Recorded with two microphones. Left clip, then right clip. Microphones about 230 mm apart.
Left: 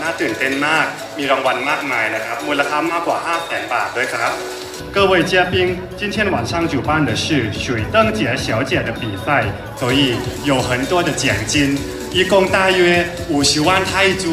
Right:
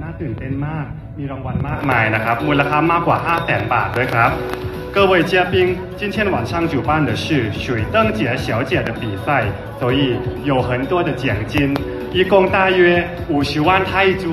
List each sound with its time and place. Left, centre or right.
0.6 s speech: left